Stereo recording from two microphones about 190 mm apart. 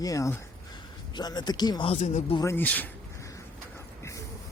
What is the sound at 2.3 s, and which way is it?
Speech, 15° left (ahead or behind).